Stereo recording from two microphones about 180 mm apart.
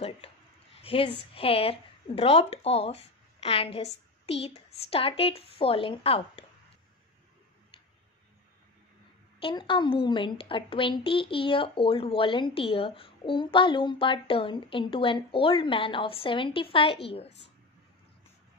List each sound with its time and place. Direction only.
0.8 s speech: 30° left (ahead or behind)
9.4 s a woman's voice: 30° left (ahead or behind)